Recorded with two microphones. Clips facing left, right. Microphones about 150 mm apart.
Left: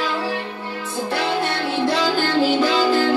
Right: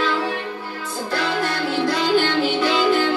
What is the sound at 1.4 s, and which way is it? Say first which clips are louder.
Music: even; 25° left (ahead or behind).